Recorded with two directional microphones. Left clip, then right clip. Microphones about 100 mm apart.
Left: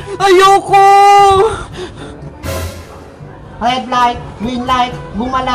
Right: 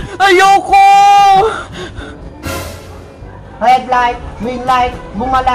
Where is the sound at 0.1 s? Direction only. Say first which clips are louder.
Even; 30° right (ahead or behind).